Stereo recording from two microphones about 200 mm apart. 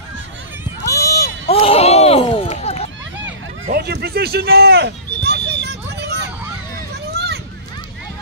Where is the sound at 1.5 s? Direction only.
30° left (ahead or behind).